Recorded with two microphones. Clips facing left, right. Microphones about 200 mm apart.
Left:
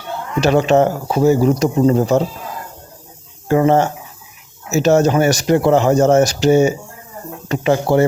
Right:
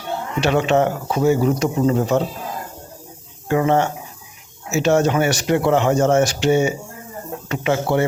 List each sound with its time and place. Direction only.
0.3 s speech: 40° left (ahead or behind)
3.5 s speech: 35° left (ahead or behind)